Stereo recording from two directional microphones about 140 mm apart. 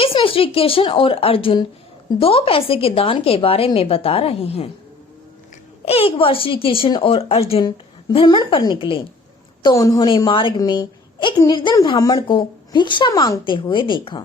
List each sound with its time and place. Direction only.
0.0 s a woman's voice: 40° left (ahead or behind)
5.8 s a woman's voice: 45° left (ahead or behind)
9.6 s a woman's voice: 25° left (ahead or behind)